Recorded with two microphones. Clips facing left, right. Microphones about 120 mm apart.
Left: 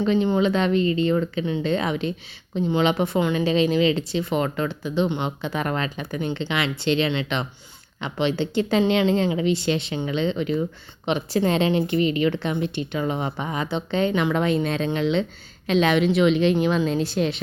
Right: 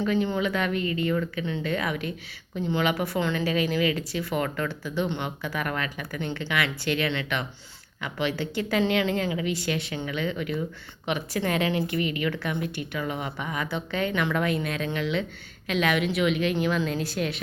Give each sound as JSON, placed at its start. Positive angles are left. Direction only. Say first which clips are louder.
{"t": 0.0, "sound": "speech", "louder": "left 5 dB", "side_deg": 25}